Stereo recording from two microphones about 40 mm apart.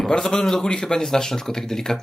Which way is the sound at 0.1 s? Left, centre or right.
Centre.